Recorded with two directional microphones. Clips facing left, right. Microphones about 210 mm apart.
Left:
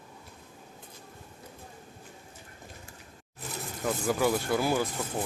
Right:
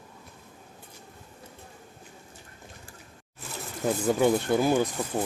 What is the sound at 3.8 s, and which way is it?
Speech, 25° right (ahead or behind).